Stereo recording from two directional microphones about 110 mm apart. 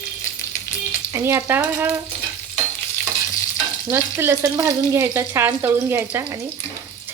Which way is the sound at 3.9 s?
25° right (ahead or behind).